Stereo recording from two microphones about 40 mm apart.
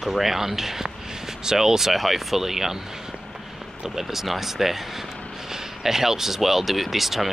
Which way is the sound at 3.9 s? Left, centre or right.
Centre.